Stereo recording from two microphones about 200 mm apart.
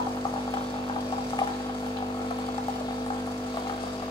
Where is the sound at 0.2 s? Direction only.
20° left (ahead or behind).